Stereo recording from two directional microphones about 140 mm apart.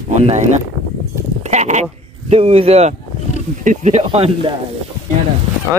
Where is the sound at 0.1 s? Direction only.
55° right (ahead or behind).